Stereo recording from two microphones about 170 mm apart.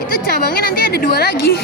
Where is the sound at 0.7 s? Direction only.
60° left (ahead or behind).